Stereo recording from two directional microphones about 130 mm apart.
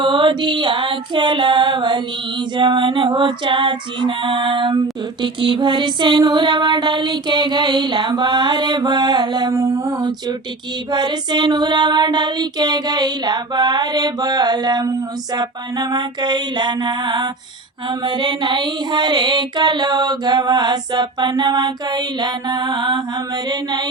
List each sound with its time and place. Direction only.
0.0 s female singing: 40° right (ahead or behind)